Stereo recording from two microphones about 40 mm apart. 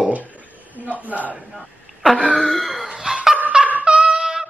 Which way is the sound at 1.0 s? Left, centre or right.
Right.